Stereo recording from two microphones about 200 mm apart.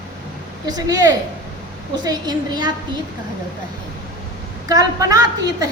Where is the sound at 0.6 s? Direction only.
20° right (ahead or behind).